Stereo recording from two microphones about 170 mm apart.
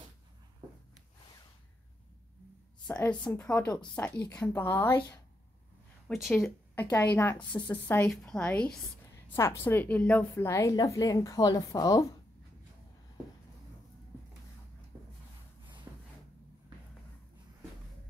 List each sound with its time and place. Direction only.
2.9 s a woman's voice: 5° left (ahead or behind)
4.7 s a woman's voice: 25° left (ahead or behind)
6.0 s a woman's voice: centre (ahead or behind); by 12.1 s 20° left (ahead or behind)
15.9 s a sound: 15° right (ahead or behind)